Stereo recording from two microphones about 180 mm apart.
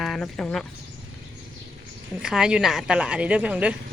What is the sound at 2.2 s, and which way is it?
A woman's voice, 5° right (ahead or behind).